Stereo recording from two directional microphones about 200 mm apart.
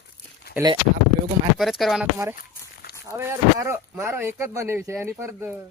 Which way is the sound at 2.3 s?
45° left (ahead or behind).